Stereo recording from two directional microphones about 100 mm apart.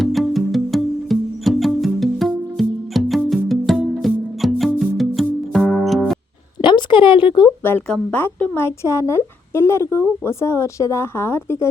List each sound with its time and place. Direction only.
0.0 s music: centre (ahead or behind)
6.6 s a sound: 55° left (ahead or behind)
8.1 s a woman's voice: 20° left (ahead or behind)